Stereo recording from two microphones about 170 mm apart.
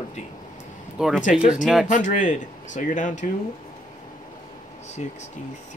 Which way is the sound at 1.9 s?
45° left (ahead or behind).